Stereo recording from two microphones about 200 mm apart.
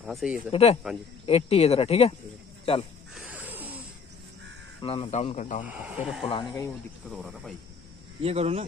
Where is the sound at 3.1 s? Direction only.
5° right (ahead or behind).